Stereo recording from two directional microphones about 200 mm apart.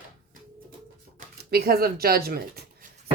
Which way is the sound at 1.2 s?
50° right (ahead or behind).